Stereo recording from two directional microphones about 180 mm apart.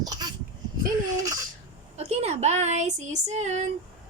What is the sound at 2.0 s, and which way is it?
Speech, 35° right (ahead or behind).